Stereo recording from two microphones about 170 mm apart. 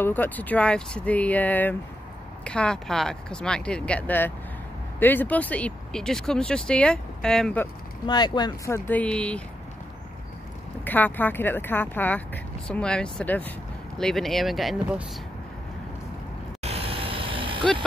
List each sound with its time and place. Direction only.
0.0 s speech: 10° left (ahead or behind)
8.1 s speech: 25° left (ahead or behind); by 9.4 s 5° left (ahead or behind)
10.8 s speech: 10° left (ahead or behind)
16.6 s vehicle: 35° right (ahead or behind)